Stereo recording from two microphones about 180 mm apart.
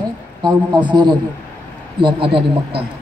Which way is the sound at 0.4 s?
25° right (ahead or behind).